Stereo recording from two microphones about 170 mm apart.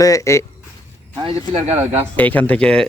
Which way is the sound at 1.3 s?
40° right (ahead or behind).